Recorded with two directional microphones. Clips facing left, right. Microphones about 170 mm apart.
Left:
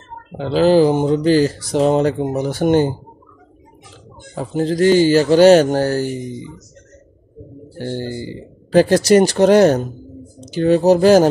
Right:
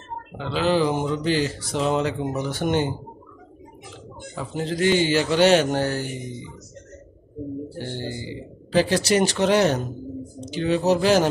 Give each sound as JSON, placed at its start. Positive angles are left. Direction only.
{"t": 0.4, "sound": "speech", "side_deg": 40}
{"t": 4.4, "sound": "speech", "side_deg": 40}
{"t": 7.9, "sound": "speech", "side_deg": 45}